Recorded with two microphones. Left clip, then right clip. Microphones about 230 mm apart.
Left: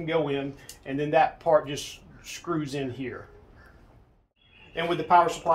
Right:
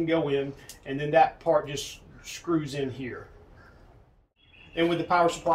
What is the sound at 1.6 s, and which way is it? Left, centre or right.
Speech, left.